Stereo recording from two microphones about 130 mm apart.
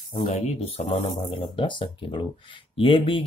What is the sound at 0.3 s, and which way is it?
Speech, 60° left (ahead or behind).